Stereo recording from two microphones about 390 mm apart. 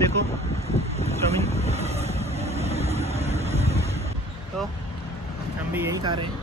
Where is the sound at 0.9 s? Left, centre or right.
Centre.